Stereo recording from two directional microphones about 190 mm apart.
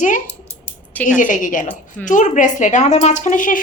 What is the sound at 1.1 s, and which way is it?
A woman's voice, 45° left (ahead or behind).